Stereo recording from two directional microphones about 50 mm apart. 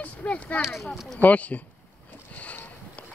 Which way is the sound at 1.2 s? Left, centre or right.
Left.